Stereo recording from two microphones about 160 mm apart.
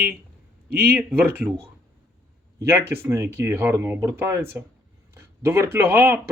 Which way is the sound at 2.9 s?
15° right (ahead or behind).